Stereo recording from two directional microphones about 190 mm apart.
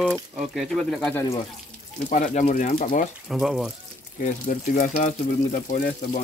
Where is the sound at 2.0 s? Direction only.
40° left (ahead or behind).